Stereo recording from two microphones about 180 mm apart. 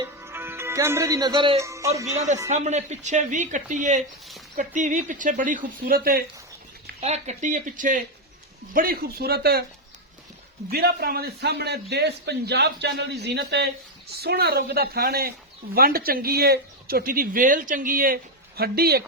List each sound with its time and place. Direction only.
0.2 s music: 10° right (ahead or behind)
2.1 s speech: 40° right (ahead or behind)
7.0 s speech: 40° right (ahead or behind); by 9.6 s 60° right (ahead or behind)
10.7 s speech: 60° right (ahead or behind)